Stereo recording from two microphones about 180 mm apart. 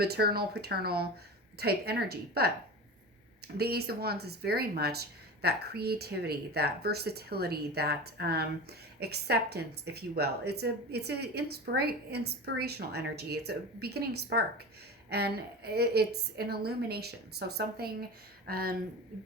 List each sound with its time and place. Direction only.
0.0 s a woman's voice: 60° right (ahead or behind)